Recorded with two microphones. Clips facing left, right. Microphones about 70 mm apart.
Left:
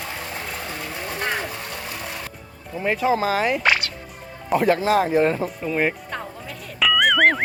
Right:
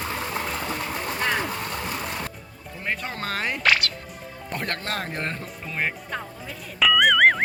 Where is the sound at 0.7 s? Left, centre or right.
Right.